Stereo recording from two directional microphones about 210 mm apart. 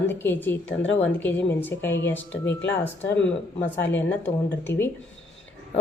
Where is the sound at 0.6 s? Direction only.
60° left (ahead or behind).